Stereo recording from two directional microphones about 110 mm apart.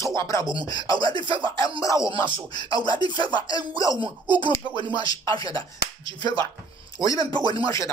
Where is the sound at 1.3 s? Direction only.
50° right (ahead or behind).